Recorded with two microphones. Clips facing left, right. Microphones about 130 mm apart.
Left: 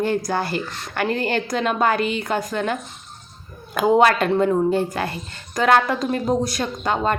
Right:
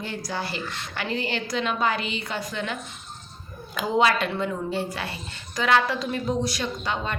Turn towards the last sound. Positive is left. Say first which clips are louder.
# left 7 dB
turn(degrees=45)  # may be behind; listen again after turning